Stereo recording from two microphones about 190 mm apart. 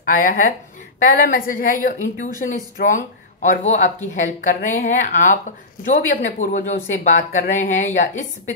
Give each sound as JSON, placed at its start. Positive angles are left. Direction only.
{"t": 0.0, "sound": "a woman's voice", "side_deg": 45}